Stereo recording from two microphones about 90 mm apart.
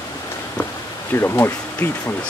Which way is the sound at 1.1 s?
25° left (ahead or behind).